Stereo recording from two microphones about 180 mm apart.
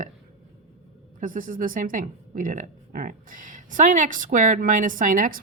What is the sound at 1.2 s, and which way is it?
A woman's voice, 50° right (ahead or behind).